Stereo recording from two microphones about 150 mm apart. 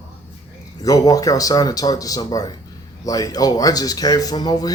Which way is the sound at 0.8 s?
25° left (ahead or behind).